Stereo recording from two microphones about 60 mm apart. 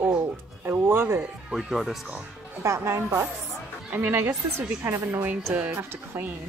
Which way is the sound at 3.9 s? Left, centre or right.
Right.